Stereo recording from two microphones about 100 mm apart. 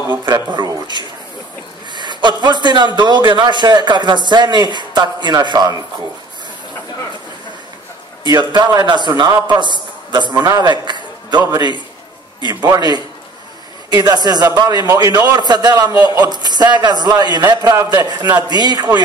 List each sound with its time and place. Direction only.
0.7 s a man's voice: 45° right (ahead or behind)
8.3 s a man's voice: 50° right (ahead or behind)